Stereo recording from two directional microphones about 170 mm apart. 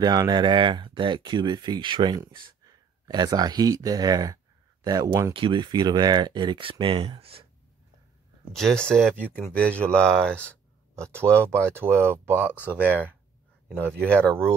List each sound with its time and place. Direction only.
0.0 s speech: 25° right (ahead or behind)
8.5 s speech: 5° left (ahead or behind)
11.0 s speech: 15° right (ahead or behind)